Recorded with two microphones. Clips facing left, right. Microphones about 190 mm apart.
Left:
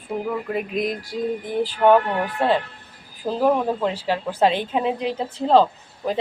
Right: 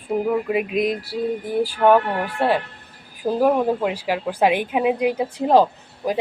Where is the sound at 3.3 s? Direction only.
10° right (ahead or behind).